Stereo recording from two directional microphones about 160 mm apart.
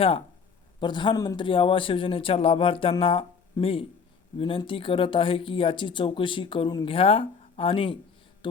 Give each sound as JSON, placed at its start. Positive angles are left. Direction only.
{"t": 0.8, "sound": "speech", "side_deg": 30}